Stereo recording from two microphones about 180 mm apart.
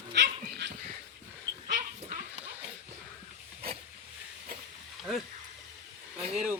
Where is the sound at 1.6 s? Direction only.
50° right (ahead or behind).